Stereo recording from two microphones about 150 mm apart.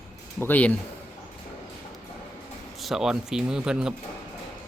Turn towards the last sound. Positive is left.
turn(degrees=-5)  # may be behind; listen again after turning